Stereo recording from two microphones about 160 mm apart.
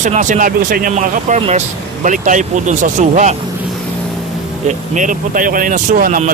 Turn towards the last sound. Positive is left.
turn(degrees=-60)  # may be behind; listen again after turning